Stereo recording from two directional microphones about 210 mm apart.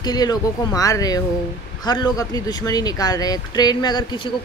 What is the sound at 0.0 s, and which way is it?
Speech, 20° left (ahead or behind).